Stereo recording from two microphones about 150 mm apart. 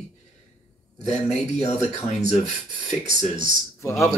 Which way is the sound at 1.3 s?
45° left (ahead or behind).